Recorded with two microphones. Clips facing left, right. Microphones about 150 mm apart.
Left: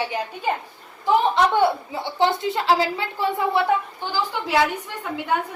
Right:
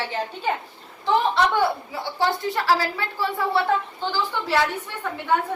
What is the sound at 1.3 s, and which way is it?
A woman's voice, 20° left (ahead or behind).